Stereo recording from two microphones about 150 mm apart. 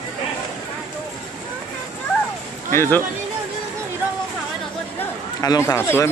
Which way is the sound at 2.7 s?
15° left (ahead or behind).